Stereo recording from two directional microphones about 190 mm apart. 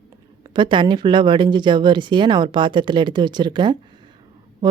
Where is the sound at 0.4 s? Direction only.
25° right (ahead or behind).